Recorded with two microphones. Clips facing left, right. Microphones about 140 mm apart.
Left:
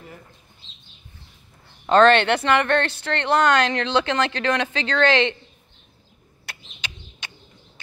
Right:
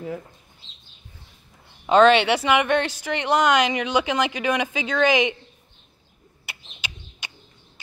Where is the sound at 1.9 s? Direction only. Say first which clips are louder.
Even; 10° right (ahead or behind).